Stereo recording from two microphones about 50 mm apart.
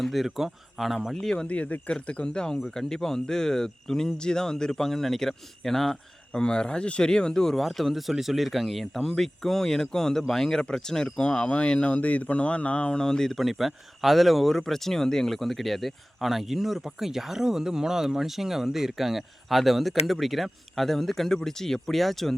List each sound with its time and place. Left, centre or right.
0.0 s speech: centre
1.1 s speech: centre
1.5 s speech: left; by 22.4 s centre